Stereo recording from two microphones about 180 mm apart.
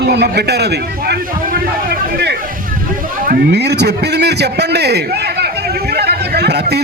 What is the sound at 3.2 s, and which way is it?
A man's voice, 60° right (ahead or behind).